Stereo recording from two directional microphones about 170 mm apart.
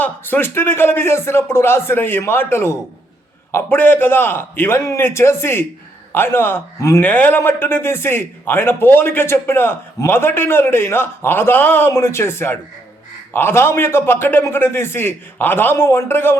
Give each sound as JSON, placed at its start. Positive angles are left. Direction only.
{"t": 0.0, "sound": "a man's voice", "side_deg": 10}